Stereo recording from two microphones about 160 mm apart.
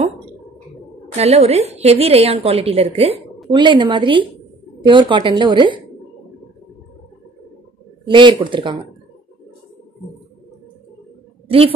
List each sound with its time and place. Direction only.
1.1 s a woman's voice: 40° right (ahead or behind)
3.4 s a woman's voice: 30° right (ahead or behind)
8.0 s a woman's voice: 30° right (ahead or behind)
11.4 s a woman's voice: 35° right (ahead or behind)